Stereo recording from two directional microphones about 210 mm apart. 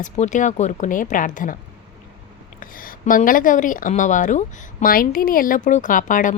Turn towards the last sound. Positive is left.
turn(degrees=40)  # may be behind; listen again after turning